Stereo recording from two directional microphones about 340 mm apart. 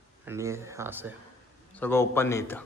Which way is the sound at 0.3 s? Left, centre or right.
Centre.